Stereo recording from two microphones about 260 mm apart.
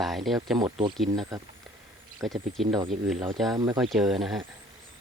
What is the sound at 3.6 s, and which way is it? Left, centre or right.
Speech, centre.